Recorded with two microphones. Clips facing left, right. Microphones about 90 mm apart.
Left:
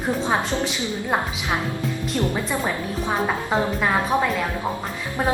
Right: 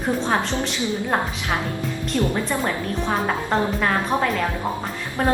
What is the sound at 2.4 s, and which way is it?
A woman's voice, 5° left (ahead or behind).